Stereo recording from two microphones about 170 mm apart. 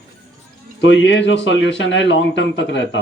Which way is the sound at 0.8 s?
90° left.